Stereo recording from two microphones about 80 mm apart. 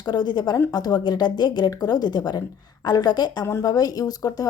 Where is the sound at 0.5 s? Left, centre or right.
Left.